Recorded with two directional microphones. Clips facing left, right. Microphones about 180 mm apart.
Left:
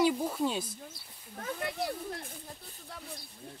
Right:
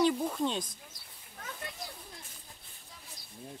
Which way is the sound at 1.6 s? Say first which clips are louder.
Left 13 dB; 65° left (ahead or behind).